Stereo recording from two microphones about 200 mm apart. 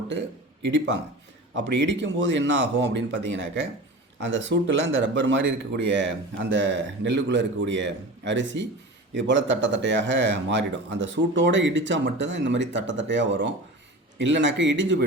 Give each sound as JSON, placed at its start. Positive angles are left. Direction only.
{"t": 0.6, "sound": "speech", "side_deg": -65}